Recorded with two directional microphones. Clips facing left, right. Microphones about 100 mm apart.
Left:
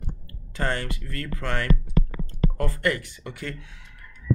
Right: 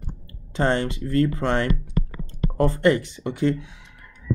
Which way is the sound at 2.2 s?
25° right (ahead or behind).